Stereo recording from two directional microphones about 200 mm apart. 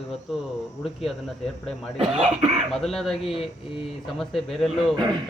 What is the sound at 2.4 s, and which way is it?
Speech, 30° right (ahead or behind).